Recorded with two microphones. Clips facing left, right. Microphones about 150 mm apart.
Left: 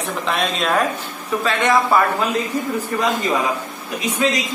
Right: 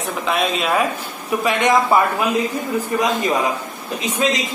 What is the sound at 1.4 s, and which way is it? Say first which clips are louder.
Speech: right 1 dB; 15° right (ahead or behind).